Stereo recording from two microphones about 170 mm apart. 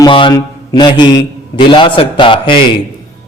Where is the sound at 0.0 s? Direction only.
30° left (ahead or behind).